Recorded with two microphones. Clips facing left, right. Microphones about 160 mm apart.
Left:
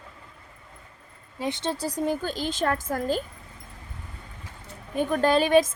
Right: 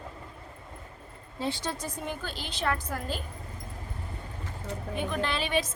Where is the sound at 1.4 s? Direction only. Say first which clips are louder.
Left 4 dB; 25° left (ahead or behind); by 3.2 s 45° left (ahead or behind).